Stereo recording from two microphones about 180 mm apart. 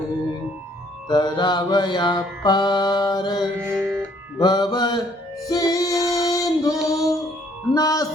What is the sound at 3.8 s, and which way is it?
Music, 5° left (ahead or behind).